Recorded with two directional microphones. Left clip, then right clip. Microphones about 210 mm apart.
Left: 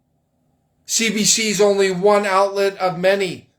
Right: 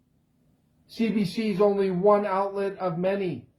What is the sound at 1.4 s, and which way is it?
Speech, 15° left (ahead or behind).